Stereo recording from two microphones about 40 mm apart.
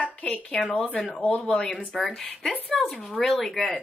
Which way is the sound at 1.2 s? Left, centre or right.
Left.